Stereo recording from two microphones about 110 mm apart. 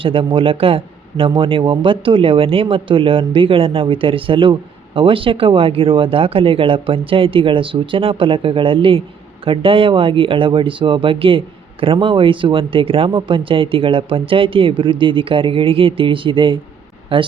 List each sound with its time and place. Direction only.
0.0 s speech: 55° right (ahead or behind)